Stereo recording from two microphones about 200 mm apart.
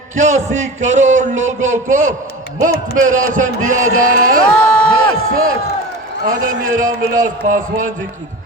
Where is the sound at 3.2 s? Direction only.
40° right (ahead or behind).